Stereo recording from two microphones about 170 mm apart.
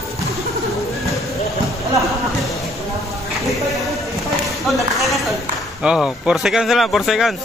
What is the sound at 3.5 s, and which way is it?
Speech, centre (ahead or behind).